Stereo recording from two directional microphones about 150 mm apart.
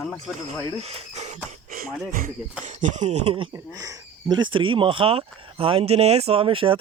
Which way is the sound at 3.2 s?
35° right (ahead or behind).